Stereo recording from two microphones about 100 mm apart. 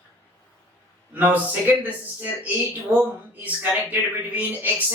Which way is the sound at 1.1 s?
20° right (ahead or behind).